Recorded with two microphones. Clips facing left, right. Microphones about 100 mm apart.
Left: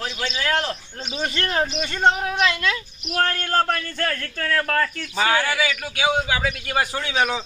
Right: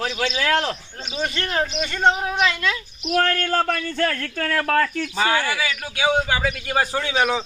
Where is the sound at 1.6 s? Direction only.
20° left (ahead or behind).